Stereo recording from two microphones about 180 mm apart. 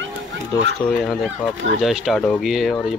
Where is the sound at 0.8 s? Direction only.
5° left (ahead or behind).